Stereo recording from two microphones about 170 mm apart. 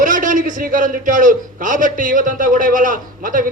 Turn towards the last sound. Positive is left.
turn(degrees=-55)  # may be behind; listen again after turning